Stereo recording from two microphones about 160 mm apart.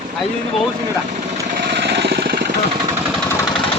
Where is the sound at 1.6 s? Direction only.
90° right.